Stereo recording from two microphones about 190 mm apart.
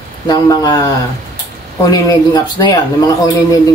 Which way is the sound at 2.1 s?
20° left (ahead or behind).